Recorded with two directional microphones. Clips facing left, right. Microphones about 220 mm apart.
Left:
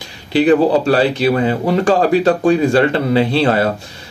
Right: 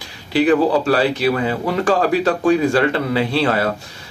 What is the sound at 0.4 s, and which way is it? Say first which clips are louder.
Speech: left 3 dB; 30° left (ahead or behind).